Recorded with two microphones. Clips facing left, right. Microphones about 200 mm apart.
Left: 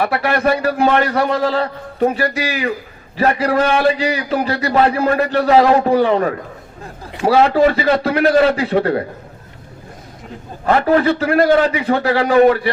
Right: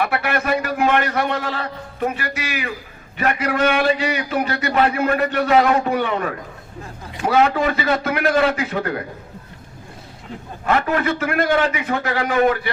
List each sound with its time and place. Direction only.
0.0 s a man's voice: 35° left (ahead or behind)
10.7 s a man's voice: 35° left (ahead or behind)